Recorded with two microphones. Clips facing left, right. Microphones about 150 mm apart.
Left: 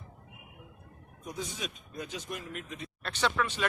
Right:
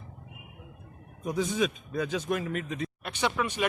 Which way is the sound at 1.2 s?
90° right.